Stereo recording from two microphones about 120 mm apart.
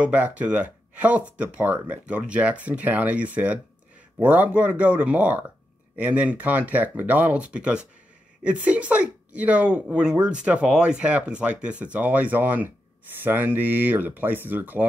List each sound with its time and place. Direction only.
0.0 s speech: 10° right (ahead or behind)